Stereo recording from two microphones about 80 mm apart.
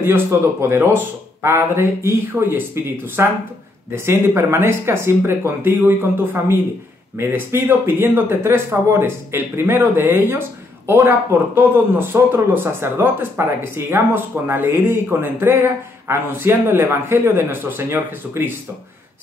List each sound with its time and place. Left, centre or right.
0.0 s speech: right